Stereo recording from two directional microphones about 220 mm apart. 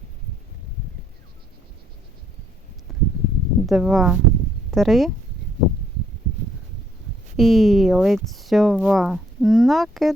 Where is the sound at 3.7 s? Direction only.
5° right (ahead or behind).